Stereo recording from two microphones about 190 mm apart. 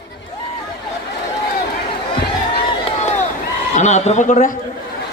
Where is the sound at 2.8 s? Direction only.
35° left (ahead or behind).